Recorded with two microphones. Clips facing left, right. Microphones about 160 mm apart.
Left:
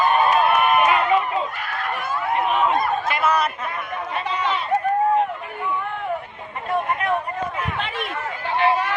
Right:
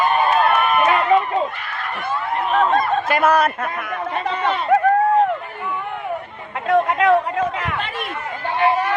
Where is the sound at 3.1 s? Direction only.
50° right (ahead or behind).